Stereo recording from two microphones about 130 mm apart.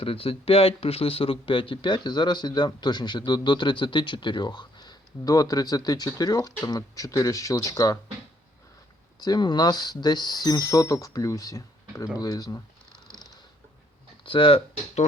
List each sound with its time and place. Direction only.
0.0 s speech: 45° left (ahead or behind); by 7.9 s 25° left (ahead or behind)
9.2 s speech: 30° left (ahead or behind)
14.3 s speech: 40° left (ahead or behind)